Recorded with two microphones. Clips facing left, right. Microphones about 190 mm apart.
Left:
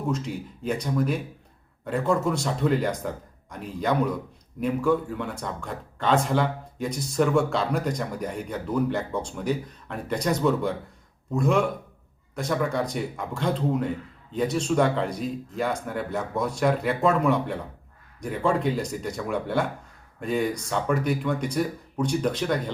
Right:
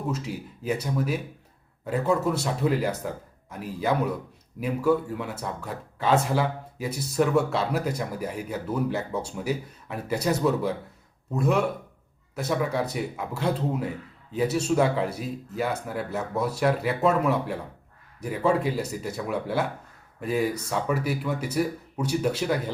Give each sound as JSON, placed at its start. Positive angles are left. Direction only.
{"t": 0.1, "sound": "a man's voice", "side_deg": -5}